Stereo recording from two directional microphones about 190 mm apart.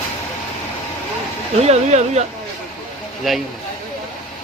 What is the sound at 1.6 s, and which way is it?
Speech, 35° right (ahead or behind).